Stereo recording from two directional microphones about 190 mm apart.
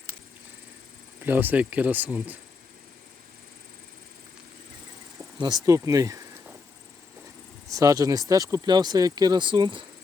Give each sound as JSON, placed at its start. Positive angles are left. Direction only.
{"t": 1.2, "sound": "speech", "side_deg": -10}
{"t": 5.4, "sound": "speech", "side_deg": -20}
{"t": 7.7, "sound": "speech", "side_deg": -15}